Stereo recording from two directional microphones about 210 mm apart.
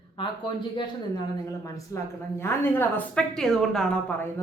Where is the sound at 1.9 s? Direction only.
15° left (ahead or behind).